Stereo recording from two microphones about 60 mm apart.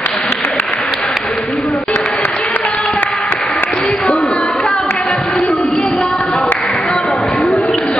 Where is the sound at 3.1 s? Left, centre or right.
Centre.